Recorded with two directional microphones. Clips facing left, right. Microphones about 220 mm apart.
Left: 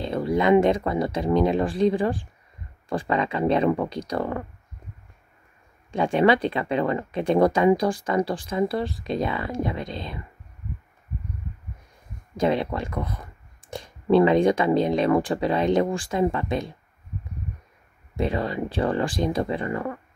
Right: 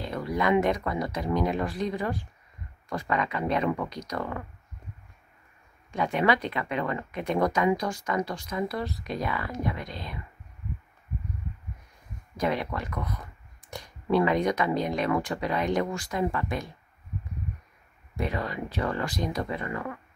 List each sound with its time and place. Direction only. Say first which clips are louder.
0.0 s speech: left 6 dB; 25° left (ahead or behind)
5.9 s speech: left 6 dB; 30° left (ahead or behind)
12.4 s speech: left 6 dB; 25° left (ahead or behind)
18.1 s speech: left 6 dB; 25° left (ahead or behind)